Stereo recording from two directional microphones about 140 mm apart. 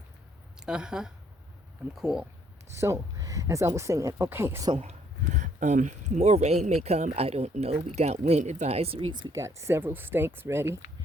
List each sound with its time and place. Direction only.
0.6 s speech: 5° right (ahead or behind)
2.7 s speech: 20° right (ahead or behind)
4.8 s speech: 55° right (ahead or behind)
9.1 s speech: 30° right (ahead or behind)
9.4 s speech: 20° right (ahead or behind)